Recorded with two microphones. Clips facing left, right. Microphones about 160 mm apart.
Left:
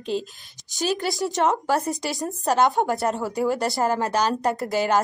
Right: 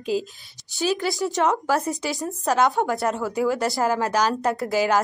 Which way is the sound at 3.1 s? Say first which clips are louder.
Right 1 dB; 20° left (ahead or behind).